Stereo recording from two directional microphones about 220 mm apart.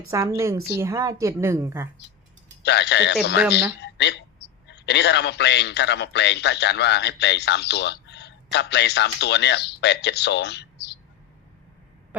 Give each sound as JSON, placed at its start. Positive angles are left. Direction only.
{"t": 0.1, "sound": "a woman's voice", "side_deg": -15}
{"t": 2.6, "sound": "a man's voice", "side_deg": 50}